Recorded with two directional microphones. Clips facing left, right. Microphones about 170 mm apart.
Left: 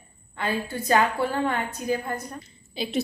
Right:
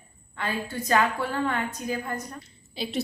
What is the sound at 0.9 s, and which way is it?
Speech, 25° left (ahead or behind).